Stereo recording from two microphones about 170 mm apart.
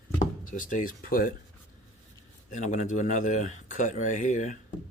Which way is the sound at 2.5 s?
45° left (ahead or behind).